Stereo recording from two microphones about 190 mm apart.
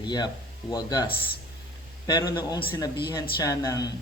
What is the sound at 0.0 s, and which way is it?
A man's voice, 20° left (ahead or behind).